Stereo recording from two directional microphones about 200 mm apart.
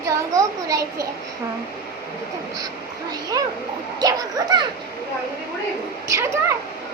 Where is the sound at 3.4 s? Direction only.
20° right (ahead or behind).